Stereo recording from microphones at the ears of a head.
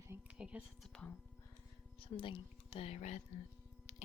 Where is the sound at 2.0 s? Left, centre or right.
Left.